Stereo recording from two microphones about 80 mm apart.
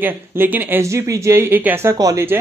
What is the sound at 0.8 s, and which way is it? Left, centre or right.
Speech, right.